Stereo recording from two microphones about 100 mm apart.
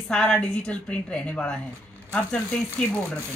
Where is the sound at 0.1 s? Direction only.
10° left (ahead or behind).